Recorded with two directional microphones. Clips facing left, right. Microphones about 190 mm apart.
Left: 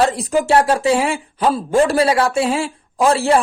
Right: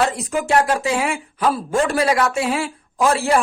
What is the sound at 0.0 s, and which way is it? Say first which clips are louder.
Speech: left 4 dB; 35° left (ahead or behind).